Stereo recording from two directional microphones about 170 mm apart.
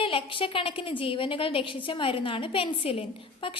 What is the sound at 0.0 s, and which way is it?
A woman's voice, 30° left (ahead or behind).